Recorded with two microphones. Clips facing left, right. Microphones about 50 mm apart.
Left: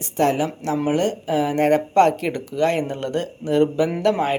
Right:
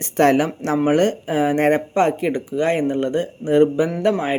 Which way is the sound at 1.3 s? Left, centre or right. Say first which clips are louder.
Left 2 dB; right.